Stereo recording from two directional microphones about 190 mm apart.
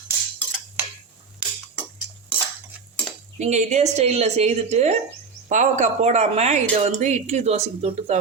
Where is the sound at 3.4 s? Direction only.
40° right (ahead or behind).